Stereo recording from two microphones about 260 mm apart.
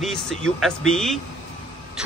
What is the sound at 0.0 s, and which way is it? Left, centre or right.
Speech, centre.